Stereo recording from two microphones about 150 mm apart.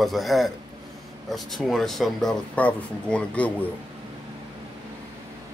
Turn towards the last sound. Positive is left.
turn(degrees=10)  # may be behind; listen again after turning